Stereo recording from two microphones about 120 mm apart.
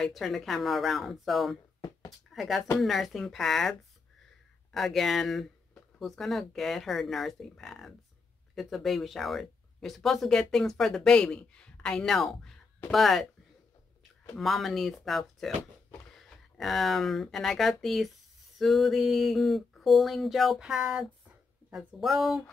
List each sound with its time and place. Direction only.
0.0 s speech: centre (ahead or behind)
1.8 s a sound: 30° left (ahead or behind)
2.3 s speech: centre (ahead or behind)
4.7 s speech: centre (ahead or behind)